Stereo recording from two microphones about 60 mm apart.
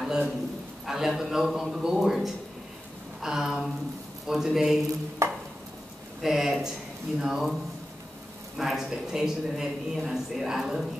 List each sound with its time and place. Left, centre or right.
0.0 s a sound: centre
0.8 s a man's voice: centre
5.2 s stir: right
6.2 s speech: centre
8.5 s a man's voice: centre